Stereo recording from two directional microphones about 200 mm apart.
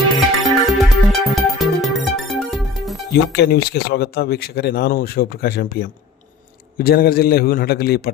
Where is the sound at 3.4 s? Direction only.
55° left (ahead or behind).